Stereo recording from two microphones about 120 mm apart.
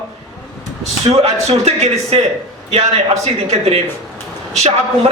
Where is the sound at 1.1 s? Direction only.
60° right (ahead or behind).